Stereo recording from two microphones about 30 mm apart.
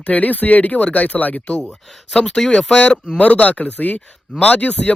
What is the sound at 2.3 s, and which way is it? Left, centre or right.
Speech, centre.